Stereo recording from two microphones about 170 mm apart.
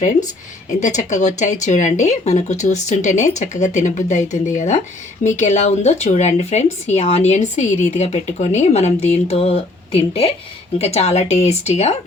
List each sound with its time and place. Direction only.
0.7 s speech: 45° left (ahead or behind)